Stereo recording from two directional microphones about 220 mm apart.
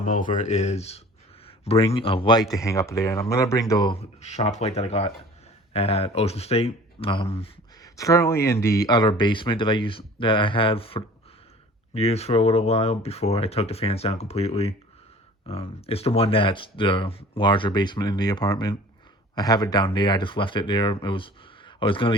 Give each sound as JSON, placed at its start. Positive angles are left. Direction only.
{"t": 0.0, "sound": "a man's voice", "side_deg": 35}
{"t": 7.9, "sound": "a man's voice", "side_deg": 15}